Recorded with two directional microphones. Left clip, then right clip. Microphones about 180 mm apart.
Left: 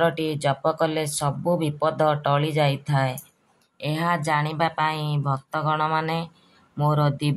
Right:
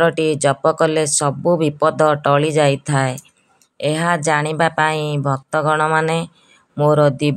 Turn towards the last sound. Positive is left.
turn(degrees=-45)  # may be behind; listen again after turning